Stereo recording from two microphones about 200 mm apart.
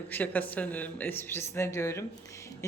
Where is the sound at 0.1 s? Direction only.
10° left (ahead or behind).